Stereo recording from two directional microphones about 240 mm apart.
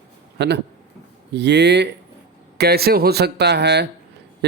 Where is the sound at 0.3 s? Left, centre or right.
Right.